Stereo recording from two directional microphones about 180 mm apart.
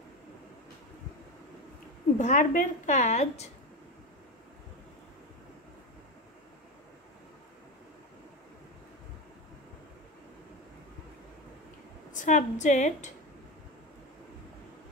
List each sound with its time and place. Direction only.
2.1 s a woman's voice: 40° left (ahead or behind)
12.1 s a woman's voice: 45° left (ahead or behind)